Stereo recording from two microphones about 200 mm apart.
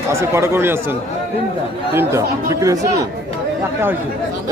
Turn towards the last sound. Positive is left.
turn(degrees=-15)  # may be behind; listen again after turning